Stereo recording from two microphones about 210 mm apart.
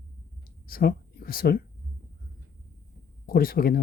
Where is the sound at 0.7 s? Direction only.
45° left (ahead or behind).